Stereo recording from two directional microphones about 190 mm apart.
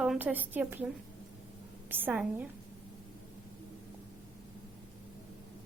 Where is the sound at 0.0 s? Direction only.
5° right (ahead or behind).